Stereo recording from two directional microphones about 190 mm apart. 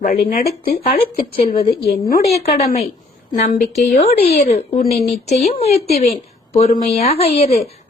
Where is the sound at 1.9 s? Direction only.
50° left (ahead or behind).